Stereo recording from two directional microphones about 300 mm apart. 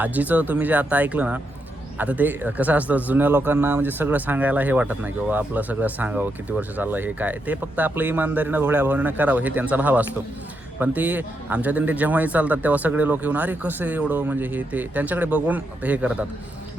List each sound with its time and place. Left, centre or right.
0.0 s speech: centre